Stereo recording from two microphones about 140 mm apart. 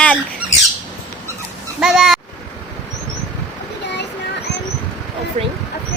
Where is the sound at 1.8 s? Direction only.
Centre (ahead or behind).